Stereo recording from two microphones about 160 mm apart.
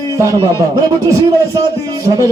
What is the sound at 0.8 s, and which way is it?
Speech, 25° right (ahead or behind).